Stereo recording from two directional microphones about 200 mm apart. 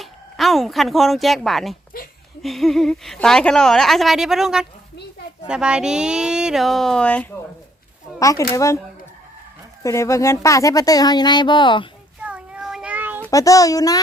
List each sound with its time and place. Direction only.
0.0 s speech: centre (ahead or behind)
1.9 s a sound: 45° left (ahead or behind)
2.4 s a woman's voice: centre (ahead or behind)
8.2 s speech: 15° left (ahead or behind)
9.8 s speech: 15° left (ahead or behind)
12.2 s child singing: 5° right (ahead or behind)
13.2 s speech: 15° left (ahead or behind)